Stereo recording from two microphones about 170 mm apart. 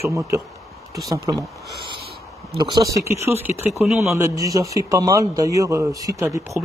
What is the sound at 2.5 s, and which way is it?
Speech, 30° right (ahead or behind).